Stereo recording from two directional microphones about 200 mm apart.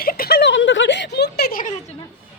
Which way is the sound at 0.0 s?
50° left (ahead or behind).